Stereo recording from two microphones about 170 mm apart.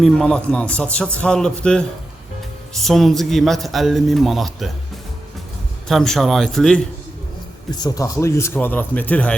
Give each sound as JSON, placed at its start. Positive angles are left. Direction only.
{"t": 0.0, "sound": "a man's voice", "side_deg": 5}
{"t": 5.9, "sound": "a man's voice", "side_deg": 0}
{"t": 7.7, "sound": "speech", "side_deg": 25}